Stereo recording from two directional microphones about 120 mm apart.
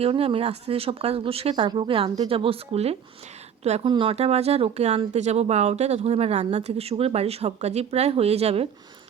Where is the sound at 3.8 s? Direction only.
45° right (ahead or behind).